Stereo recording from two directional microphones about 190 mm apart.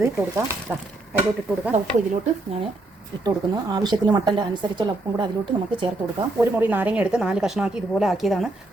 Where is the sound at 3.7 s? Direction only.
20° right (ahead or behind).